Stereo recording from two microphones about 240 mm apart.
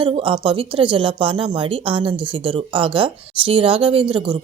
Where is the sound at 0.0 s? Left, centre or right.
Right.